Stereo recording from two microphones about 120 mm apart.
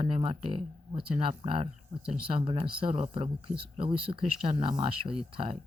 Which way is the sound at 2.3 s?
50° right (ahead or behind).